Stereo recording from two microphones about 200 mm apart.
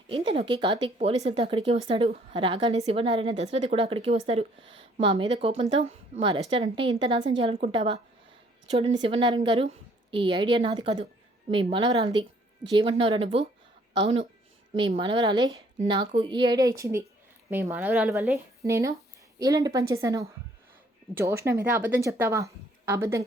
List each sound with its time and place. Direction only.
0.1 s a woman's voice: 25° right (ahead or behind)
14.8 s a woman's voice: 25° right (ahead or behind); by 18.3 s 5° right (ahead or behind)
18.6 s speech: 15° right (ahead or behind)